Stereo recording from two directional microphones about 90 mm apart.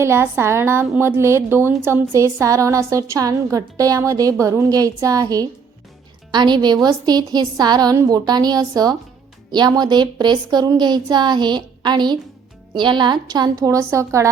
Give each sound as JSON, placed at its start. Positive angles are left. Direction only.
{"t": 0.0, "sound": "a woman's voice", "side_deg": -30}
{"t": 6.3, "sound": "a woman's voice", "side_deg": -55}
{"t": 13.6, "sound": "a woman's voice", "side_deg": -35}